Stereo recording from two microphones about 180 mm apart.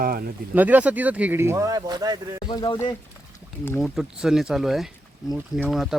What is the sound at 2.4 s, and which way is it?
Speech, 25° left (ahead or behind).